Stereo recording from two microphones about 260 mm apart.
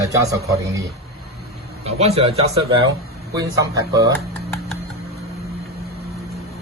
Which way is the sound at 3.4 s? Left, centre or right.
Centre.